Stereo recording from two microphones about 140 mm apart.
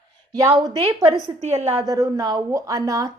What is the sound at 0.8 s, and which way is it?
Speech, 40° right (ahead or behind).